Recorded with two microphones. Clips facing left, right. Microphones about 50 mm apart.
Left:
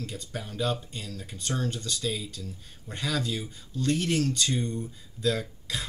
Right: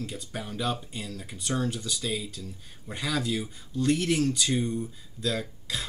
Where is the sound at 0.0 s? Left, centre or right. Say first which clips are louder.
Right 1 dB; centre.